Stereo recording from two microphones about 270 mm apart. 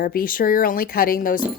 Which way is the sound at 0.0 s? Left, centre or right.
Left.